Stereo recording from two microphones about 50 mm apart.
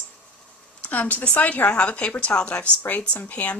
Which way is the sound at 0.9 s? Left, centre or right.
Left.